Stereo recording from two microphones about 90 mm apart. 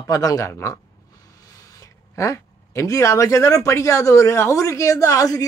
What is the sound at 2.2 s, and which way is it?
Speech, 35° left (ahead or behind).